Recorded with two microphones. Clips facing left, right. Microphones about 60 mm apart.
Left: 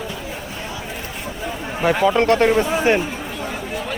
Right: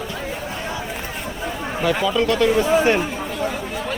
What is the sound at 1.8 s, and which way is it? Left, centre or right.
Speech, left.